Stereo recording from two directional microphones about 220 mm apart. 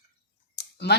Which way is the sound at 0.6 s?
50° left (ahead or behind).